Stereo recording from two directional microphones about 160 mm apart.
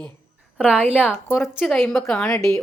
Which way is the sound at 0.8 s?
10° left (ahead or behind).